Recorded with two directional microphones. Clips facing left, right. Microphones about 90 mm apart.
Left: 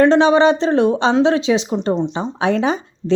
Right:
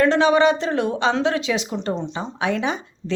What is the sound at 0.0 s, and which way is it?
Speech, 30° left (ahead or behind).